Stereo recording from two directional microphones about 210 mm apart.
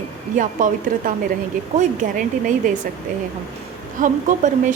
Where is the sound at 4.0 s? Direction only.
35° right (ahead or behind).